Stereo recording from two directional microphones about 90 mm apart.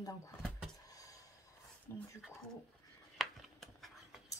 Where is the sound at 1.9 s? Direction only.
35° left (ahead or behind).